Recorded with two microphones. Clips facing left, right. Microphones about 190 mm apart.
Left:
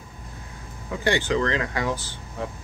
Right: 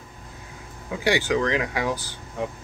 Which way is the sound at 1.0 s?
10° right (ahead or behind).